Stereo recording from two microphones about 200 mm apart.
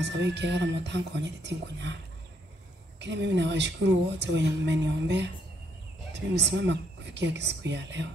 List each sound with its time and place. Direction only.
0.0 s speech: 60° right (ahead or behind)
3.0 s speech: 60° right (ahead or behind)
6.5 s speech: 60° right (ahead or behind)